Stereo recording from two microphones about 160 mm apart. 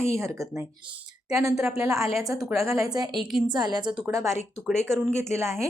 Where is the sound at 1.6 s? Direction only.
5° right (ahead or behind).